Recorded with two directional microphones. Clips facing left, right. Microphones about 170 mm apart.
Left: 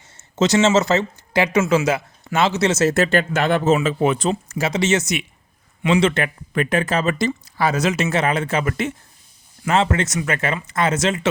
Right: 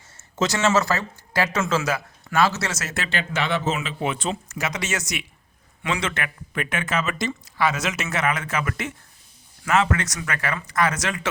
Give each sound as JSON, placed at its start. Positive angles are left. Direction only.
{"t": 0.2, "sound": "speech", "side_deg": 20}
{"t": 2.9, "sound": "speech", "side_deg": 45}